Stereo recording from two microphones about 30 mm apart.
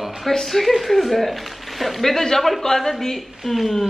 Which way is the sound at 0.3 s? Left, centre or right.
Centre.